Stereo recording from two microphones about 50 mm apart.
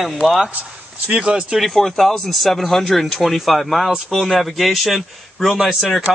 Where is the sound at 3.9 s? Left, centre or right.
Centre.